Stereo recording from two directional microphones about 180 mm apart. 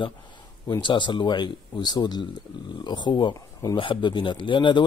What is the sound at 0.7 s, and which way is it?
Speech, 25° left (ahead or behind).